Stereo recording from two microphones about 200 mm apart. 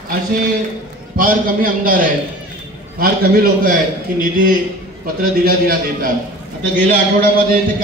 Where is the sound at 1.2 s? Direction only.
45° right (ahead or behind).